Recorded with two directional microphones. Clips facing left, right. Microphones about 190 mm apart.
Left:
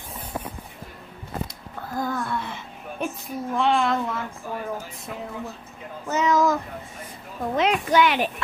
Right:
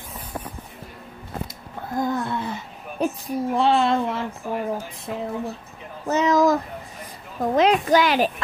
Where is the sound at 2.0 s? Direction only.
20° right (ahead or behind).